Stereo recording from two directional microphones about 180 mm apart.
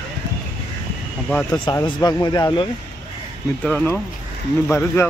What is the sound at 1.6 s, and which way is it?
Speech, 25° left (ahead or behind).